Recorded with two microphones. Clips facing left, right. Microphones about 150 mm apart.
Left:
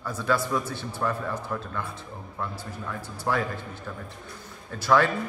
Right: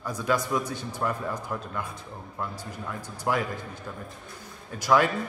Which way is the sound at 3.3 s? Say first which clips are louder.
Even; 20° right (ahead or behind).